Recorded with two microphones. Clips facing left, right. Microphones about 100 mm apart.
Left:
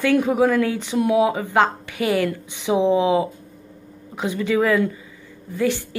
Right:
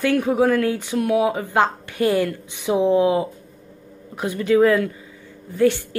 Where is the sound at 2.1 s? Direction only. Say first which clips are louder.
Even; 15° right (ahead or behind).